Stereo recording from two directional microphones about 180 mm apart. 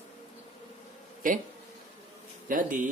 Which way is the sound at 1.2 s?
50° right (ahead or behind).